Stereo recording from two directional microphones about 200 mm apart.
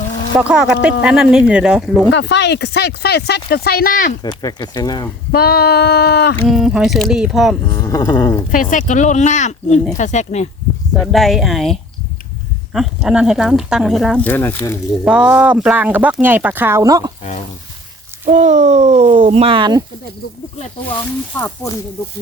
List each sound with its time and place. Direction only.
0.3 s speech: 5° right (ahead or behind)
2.1 s speech: 60° left (ahead or behind); by 4.1 s 45° left (ahead or behind)
4.2 s speech: 20° left (ahead or behind)
5.3 s speech: 55° left (ahead or behind)
6.5 s speech: 5° right (ahead or behind)
7.7 s speech: 15° left (ahead or behind)
8.5 s speech: 40° left (ahead or behind)
10.9 s speech: centre (ahead or behind)
14.3 s speech: 10° left (ahead or behind)
15.0 s speech: 5° right (ahead or behind)
18.3 s speech: 35° right (ahead or behind)
21.3 s speech: 10° left (ahead or behind)